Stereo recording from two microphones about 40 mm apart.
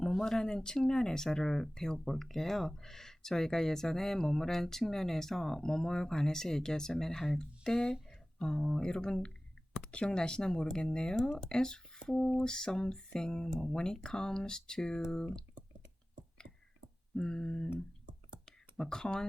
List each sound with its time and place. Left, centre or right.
0.2 s speech: centre
11.2 s speech: centre
11.4 s speech: centre
17.2 s speech: centre
18.8 s speech: centre